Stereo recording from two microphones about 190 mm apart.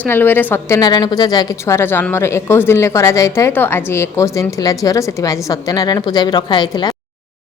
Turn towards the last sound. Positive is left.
turn(degrees=25)  # may be behind; listen again after turning